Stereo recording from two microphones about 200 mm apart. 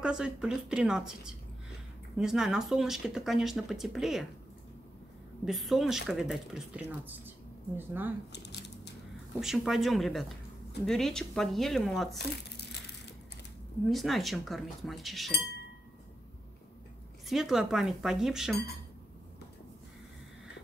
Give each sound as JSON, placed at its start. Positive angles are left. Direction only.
{"t": 0.0, "sound": "speech", "side_deg": -5}
{"t": 5.4, "sound": "speech", "side_deg": 0}
{"t": 8.3, "sound": "a sound", "side_deg": 55}
{"t": 9.4, "sound": "speech", "side_deg": 0}
{"t": 13.8, "sound": "speech", "side_deg": 0}
{"t": 17.3, "sound": "speech", "side_deg": 0}